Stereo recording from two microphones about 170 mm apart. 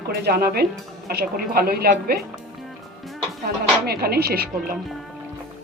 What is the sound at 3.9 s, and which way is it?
Speech, 65° right (ahead or behind).